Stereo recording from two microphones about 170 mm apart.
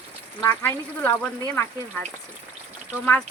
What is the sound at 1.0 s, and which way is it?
Speech, 10° left (ahead or behind).